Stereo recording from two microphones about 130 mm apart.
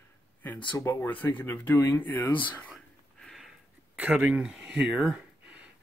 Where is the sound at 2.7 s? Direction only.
Centre (ahead or behind).